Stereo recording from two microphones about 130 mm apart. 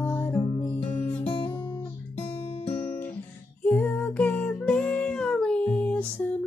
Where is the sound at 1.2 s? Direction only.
45° left (ahead or behind).